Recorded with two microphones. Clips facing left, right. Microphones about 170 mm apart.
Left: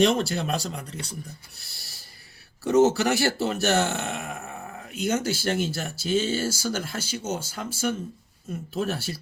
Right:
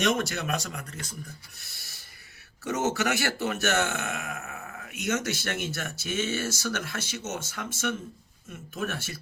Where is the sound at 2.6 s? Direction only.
35° left (ahead or behind).